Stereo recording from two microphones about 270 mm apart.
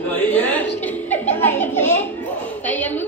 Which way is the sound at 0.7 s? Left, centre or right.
Centre.